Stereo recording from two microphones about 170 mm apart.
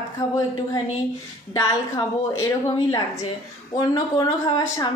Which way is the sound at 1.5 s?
20° left (ahead or behind).